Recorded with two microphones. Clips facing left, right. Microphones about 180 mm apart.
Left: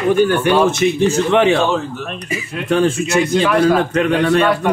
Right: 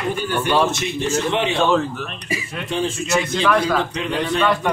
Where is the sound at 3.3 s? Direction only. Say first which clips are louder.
Left 3 dB; 5° left (ahead or behind).